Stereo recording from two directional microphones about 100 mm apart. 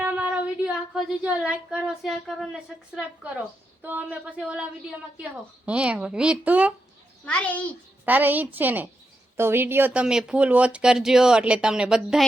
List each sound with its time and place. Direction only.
0.0 s speech: 15° right (ahead or behind)
3.8 s speech: 15° right (ahead or behind)
7.3 s a child's voice: 15° left (ahead or behind)
8.0 s a woman's voice: 20° right (ahead or behind)
9.9 s speech: 10° right (ahead or behind)